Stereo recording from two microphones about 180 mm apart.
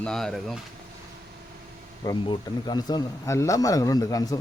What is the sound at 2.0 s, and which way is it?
Speech, 25° left (ahead or behind).